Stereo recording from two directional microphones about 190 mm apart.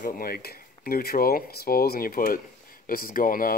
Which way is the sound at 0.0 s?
50° left (ahead or behind).